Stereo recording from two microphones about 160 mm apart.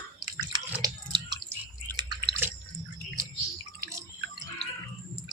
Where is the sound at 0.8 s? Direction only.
25° right (ahead or behind).